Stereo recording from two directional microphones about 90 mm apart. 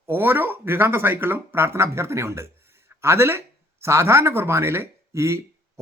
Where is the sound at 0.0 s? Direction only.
25° right (ahead or behind).